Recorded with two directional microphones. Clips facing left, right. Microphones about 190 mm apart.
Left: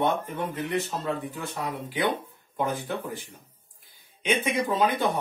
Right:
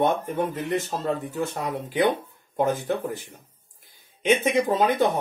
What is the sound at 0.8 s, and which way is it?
Speech, 45° right (ahead or behind).